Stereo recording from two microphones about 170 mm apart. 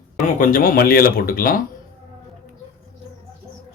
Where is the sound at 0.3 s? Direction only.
50° left (ahead or behind).